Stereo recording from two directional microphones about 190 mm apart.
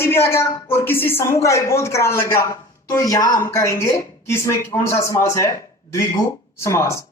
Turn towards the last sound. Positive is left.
turn(degrees=15)  # may be behind; listen again after turning